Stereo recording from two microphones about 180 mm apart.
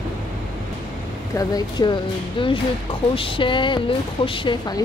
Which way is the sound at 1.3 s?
20° left (ahead or behind).